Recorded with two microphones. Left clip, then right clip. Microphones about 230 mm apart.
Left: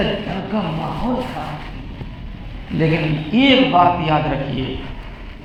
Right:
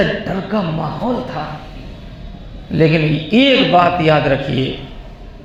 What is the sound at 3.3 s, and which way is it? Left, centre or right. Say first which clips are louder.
A man's voice: right 2 dB; right.